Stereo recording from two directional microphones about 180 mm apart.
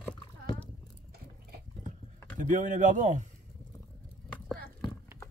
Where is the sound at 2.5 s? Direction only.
45° right (ahead or behind).